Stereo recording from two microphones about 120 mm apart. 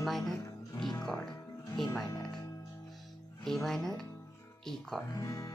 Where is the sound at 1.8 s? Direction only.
5° left (ahead or behind).